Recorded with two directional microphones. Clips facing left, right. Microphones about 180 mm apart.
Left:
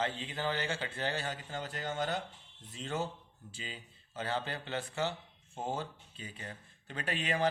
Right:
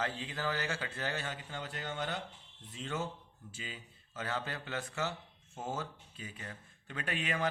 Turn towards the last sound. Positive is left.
turn(degrees=35)  # may be behind; listen again after turning